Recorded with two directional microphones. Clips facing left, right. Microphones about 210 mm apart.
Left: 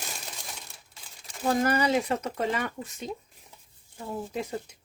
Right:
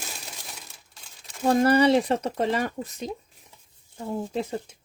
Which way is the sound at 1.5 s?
30° right (ahead or behind).